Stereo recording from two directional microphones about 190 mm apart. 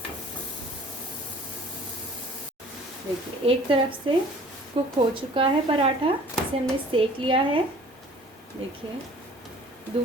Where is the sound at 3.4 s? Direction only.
30° right (ahead or behind).